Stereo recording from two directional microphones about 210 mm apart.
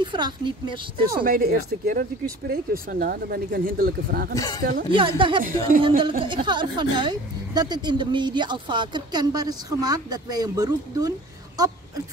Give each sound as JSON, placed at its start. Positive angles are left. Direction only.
{"t": 0.0, "sound": "speech", "side_deg": -20}
{"t": 1.0, "sound": "speech", "side_deg": -40}
{"t": 4.4, "sound": "speech", "side_deg": 15}
{"t": 4.9, "sound": "speech", "side_deg": -25}